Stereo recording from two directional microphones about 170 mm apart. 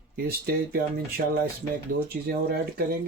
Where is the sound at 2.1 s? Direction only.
65° right (ahead or behind).